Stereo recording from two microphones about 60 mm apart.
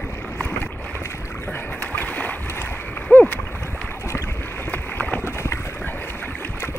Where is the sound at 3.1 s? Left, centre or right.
Left.